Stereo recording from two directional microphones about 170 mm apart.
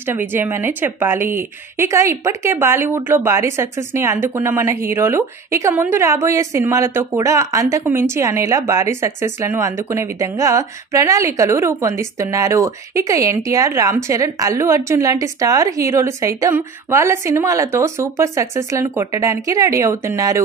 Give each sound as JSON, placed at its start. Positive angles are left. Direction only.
{"t": 0.1, "sound": "a woman's voice", "side_deg": -10}